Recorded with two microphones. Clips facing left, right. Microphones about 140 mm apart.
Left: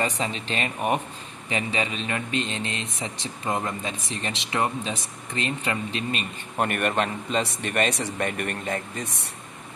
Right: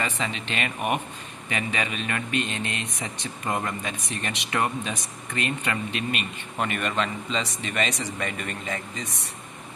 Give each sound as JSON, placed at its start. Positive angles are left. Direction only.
{"t": 0.2, "sound": "speech", "side_deg": 35}
{"t": 6.6, "sound": "speech", "side_deg": 50}